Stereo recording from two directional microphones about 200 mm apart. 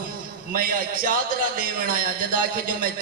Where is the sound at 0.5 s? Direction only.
45° right (ahead or behind).